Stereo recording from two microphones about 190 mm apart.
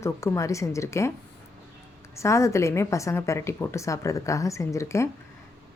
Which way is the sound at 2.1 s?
15° left (ahead or behind).